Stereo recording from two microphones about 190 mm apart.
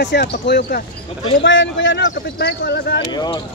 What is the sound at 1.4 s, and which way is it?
Speech, 75° left (ahead or behind).